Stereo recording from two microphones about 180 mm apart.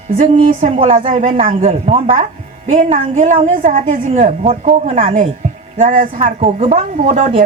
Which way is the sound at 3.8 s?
35° right (ahead or behind).